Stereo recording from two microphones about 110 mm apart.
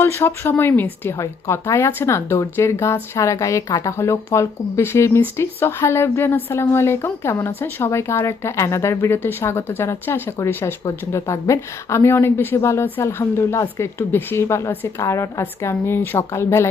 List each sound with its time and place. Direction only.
0.0 s speech: 20° left (ahead or behind)